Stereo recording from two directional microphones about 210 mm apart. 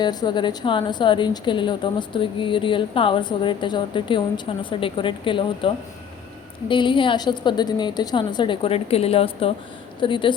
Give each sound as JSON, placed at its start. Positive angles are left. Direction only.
{"t": 0.0, "sound": "a woman's voice", "side_deg": 20}